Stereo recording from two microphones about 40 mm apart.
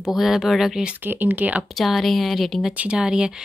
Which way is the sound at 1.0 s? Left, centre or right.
Right.